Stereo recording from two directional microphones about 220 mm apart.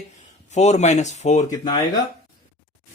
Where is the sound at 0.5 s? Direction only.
30° left (ahead or behind).